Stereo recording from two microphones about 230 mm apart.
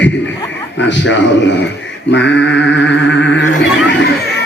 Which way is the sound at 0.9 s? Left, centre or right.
Left.